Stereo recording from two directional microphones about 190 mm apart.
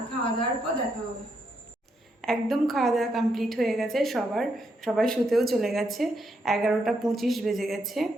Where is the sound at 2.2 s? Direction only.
Centre (ahead or behind).